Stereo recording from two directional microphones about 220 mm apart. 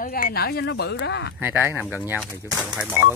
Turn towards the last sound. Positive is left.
turn(degrees=-5)  # may be behind; listen again after turning